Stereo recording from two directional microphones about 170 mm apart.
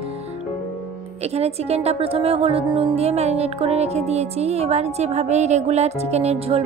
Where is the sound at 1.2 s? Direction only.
40° right (ahead or behind).